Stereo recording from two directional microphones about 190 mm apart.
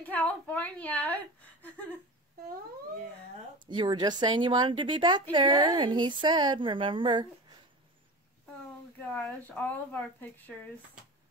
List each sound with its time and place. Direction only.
0.0 s a woman's voice: 10° left (ahead or behind)
3.6 s a woman's voice: 25° right (ahead or behind)
9.1 s speech: 5° left (ahead or behind)